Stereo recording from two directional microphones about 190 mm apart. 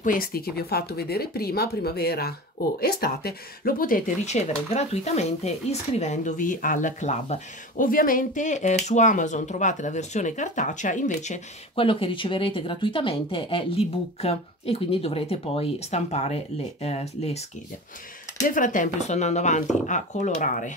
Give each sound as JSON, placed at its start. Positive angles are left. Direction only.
{"t": 0.0, "sound": "speech", "side_deg": 50}
{"t": 18.5, "sound": "speech", "side_deg": 45}